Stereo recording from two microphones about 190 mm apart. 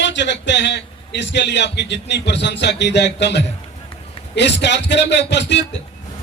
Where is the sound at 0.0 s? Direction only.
70° left (ahead or behind).